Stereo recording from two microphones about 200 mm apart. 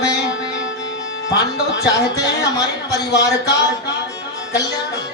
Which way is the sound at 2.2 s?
20° left (ahead or behind).